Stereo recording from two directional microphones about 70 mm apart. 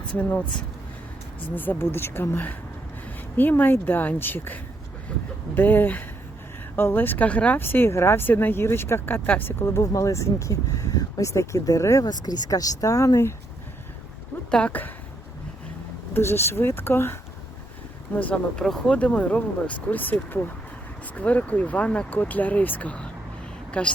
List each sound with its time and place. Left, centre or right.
0.1 s speech: left
1.5 s speech: left
7.6 s speech: left
12.0 s speech: left
14.5 s speech: left
16.1 s speech: left
18.1 s speech: left